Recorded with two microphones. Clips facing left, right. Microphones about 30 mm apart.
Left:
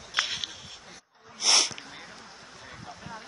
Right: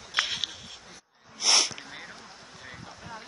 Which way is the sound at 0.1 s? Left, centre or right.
Centre.